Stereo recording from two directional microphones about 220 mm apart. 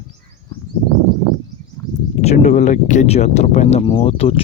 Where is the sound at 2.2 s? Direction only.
30° left (ahead or behind).